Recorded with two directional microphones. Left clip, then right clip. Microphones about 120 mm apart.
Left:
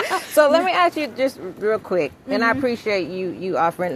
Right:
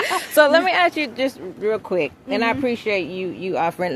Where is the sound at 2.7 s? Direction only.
50° right (ahead or behind).